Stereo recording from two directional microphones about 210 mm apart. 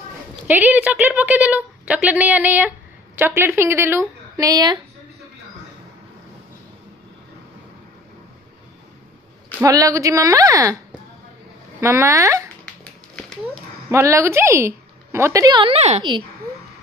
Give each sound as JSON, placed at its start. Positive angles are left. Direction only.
{"t": 0.5, "sound": "a woman's voice", "side_deg": -10}
{"t": 9.6, "sound": "a woman's voice", "side_deg": -15}
{"t": 13.8, "sound": "a woman's voice", "side_deg": -15}